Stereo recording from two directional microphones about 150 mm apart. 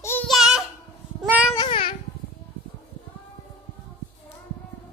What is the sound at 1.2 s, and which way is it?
Cat, 5° right (ahead or behind).